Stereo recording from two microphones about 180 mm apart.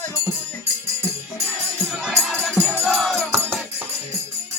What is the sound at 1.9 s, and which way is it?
Music, 5° right (ahead or behind).